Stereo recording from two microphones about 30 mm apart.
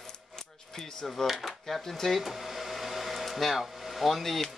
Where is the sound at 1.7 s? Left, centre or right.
Centre.